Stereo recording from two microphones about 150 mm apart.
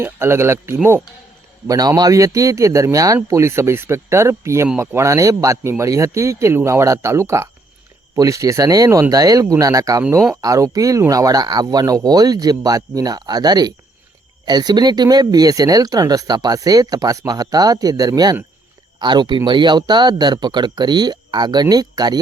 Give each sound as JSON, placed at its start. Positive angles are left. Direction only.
{"t": 0.0, "sound": "speech", "side_deg": -15}